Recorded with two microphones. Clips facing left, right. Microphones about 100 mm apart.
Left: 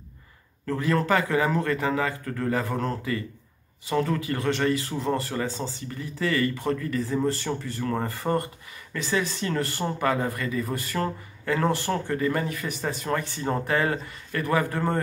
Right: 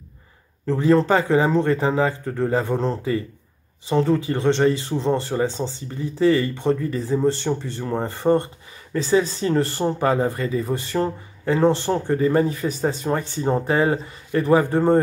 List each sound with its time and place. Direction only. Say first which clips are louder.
0.7 s speech: right 7 dB; 30° right (ahead or behind)